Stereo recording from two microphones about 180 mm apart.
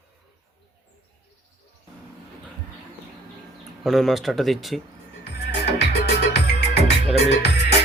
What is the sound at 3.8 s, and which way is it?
Speech, centre (ahead or behind).